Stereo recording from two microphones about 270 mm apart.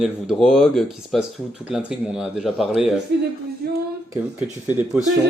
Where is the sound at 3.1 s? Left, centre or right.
Right.